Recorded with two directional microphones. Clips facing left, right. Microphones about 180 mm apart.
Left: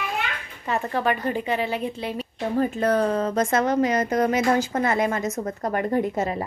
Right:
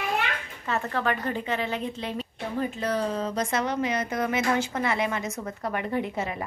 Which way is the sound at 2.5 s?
45° left (ahead or behind).